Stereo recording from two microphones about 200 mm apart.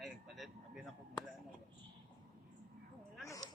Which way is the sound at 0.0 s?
Centre (ahead or behind).